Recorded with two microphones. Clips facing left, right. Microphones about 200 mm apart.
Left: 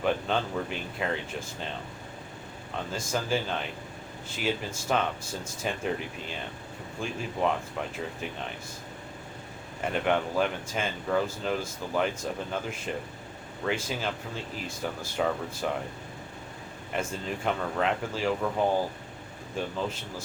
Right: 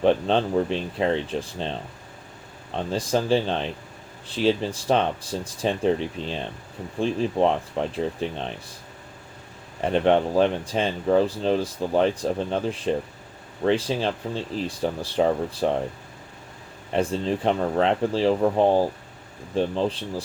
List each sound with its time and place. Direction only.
0.0 s speech: 30° right (ahead or behind)
2.7 s speech: 30° right (ahead or behind)
9.8 s speech: 30° right (ahead or behind)
16.9 s speech: 30° right (ahead or behind)